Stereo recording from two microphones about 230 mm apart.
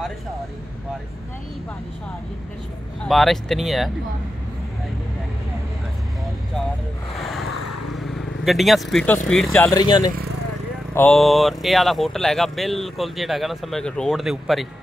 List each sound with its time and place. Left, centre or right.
3.0 s speech: centre
7.2 s vehicle: centre
7.4 s vehicle: left
7.9 s vehicle: centre
9.3 s speech: centre
9.7 s speech: centre
11.0 s speech: centre